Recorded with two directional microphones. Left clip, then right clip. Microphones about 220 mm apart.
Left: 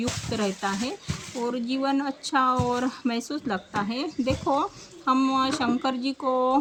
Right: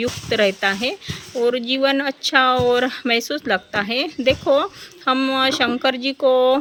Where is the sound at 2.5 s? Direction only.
20° right (ahead or behind).